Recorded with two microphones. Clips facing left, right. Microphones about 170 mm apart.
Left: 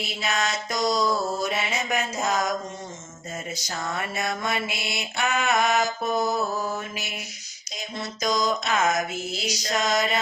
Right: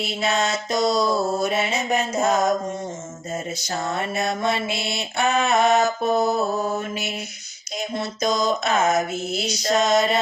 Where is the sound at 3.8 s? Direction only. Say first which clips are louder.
Right 4 dB; 25° right (ahead or behind).